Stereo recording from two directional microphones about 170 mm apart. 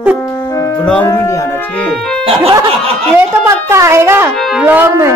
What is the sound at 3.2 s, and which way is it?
A woman's voice, 15° right (ahead or behind).